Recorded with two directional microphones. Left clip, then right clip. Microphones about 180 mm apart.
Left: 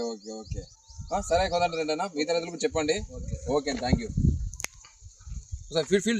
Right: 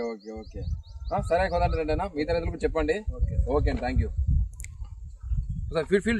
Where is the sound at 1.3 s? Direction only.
10° left (ahead or behind).